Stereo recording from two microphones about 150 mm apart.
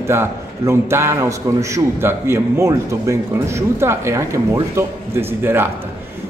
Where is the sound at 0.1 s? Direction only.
15° right (ahead or behind).